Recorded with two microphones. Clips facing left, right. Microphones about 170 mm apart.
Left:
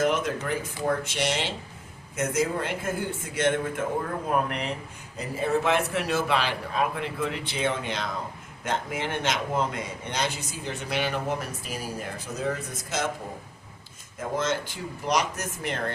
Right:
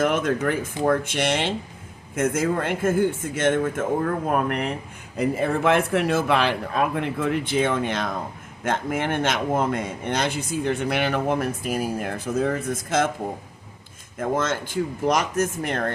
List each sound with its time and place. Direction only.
0.0 s a man's voice: 55° right (ahead or behind)
14.2 s a man's voice: 50° right (ahead or behind)